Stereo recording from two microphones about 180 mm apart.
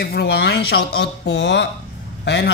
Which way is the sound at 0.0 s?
60° left (ahead or behind).